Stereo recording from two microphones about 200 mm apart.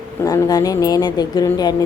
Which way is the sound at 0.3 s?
20° left (ahead or behind).